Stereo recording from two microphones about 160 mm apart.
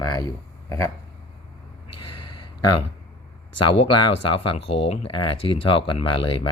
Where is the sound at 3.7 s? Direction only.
30° left (ahead or behind).